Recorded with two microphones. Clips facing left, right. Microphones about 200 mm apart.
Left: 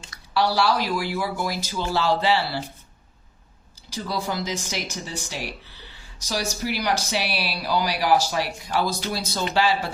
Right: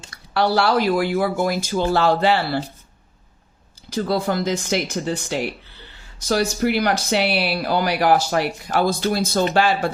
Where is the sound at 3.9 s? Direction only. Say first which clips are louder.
Right 7 dB; 55° right (ahead or behind).